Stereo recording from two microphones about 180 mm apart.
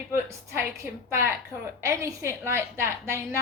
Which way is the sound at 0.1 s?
15° right (ahead or behind).